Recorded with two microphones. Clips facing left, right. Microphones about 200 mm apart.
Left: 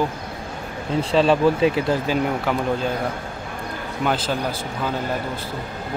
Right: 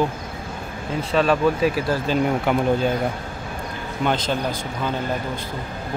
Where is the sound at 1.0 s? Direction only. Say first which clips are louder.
Left 2 dB; 30° left (ahead or behind).